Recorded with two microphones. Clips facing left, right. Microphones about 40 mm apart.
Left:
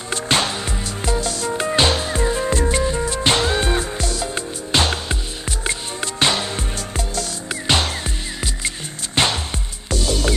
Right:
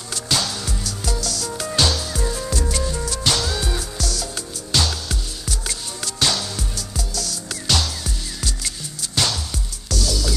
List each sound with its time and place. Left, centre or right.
0.1 s music: left